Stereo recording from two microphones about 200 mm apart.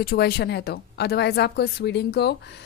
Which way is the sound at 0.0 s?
50° left (ahead or behind).